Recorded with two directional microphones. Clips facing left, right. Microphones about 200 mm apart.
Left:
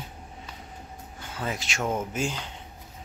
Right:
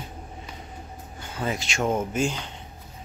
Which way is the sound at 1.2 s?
Centre (ahead or behind).